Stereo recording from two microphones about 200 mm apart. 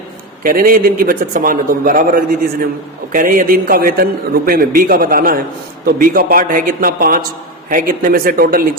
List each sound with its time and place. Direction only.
0.4 s a man's voice: 45° right (ahead or behind)